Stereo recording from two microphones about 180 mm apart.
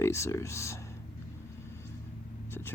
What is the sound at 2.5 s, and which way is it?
Vehicle, 10° left (ahead or behind).